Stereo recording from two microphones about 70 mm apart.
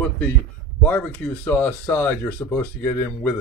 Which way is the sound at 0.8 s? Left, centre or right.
Centre.